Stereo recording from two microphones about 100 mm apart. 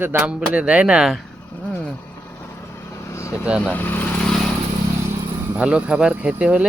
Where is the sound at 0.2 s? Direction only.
10° right (ahead or behind).